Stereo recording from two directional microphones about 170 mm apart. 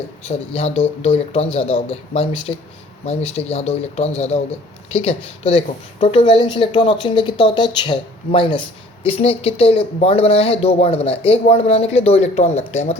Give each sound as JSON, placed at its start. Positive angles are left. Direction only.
{"t": 0.3, "sound": "speech", "side_deg": 35}